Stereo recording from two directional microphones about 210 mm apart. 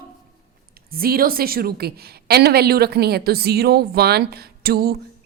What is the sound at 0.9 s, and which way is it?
A woman's voice, 45° right (ahead or behind).